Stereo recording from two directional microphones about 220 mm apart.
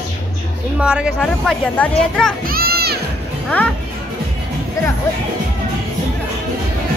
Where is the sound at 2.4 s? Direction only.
45° right (ahead or behind).